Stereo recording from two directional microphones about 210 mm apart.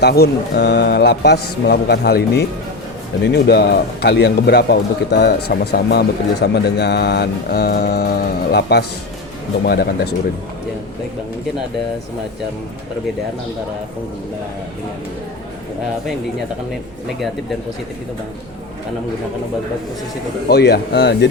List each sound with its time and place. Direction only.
0.0 s a man's voice: 50° left (ahead or behind)
20.5 s a man's voice: 50° left (ahead or behind)